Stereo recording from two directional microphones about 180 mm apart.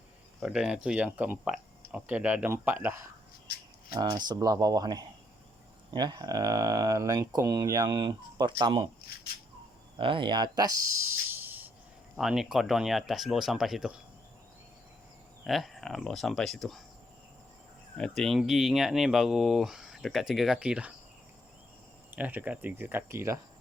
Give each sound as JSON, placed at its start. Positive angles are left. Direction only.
{"t": 0.3, "sound": "speech", "side_deg": -5}
{"t": 10.0, "sound": "speech", "side_deg": -30}
{"t": 15.4, "sound": "speech", "side_deg": 0}
{"t": 17.9, "sound": "speech", "side_deg": 5}
{"t": 22.1, "sound": "speech", "side_deg": -10}